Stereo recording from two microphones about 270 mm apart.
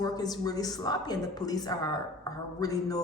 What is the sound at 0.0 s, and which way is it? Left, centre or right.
A man's voice, centre.